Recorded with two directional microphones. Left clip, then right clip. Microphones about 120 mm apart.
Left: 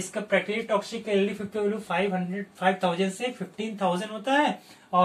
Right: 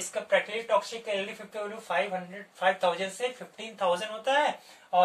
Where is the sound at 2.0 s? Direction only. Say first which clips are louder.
Left 5 dB; 15° right (ahead or behind).